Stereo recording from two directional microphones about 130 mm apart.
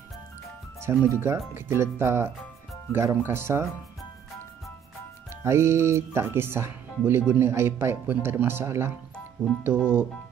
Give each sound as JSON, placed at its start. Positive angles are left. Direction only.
{"t": 0.7, "sound": "speech", "side_deg": -20}
{"t": 5.4, "sound": "speech", "side_deg": -20}